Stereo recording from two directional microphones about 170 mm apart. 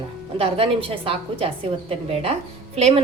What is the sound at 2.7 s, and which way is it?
Speech, 40° right (ahead or behind).